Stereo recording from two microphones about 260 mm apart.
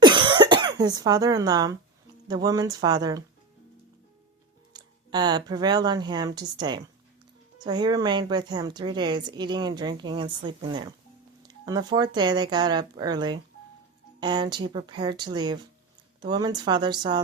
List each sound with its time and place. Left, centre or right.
0.0 s cough: centre
2.2 s speech: centre
4.7 s speech: centre